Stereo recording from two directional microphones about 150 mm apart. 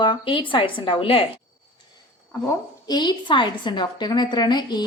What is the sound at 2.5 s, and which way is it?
A woman's voice, 25° left (ahead or behind).